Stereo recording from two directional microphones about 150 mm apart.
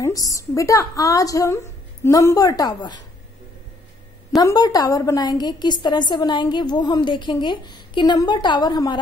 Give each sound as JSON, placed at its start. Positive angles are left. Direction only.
{"t": 0.0, "sound": "a woman's voice", "side_deg": 20}
{"t": 4.4, "sound": "a woman's voice", "side_deg": 25}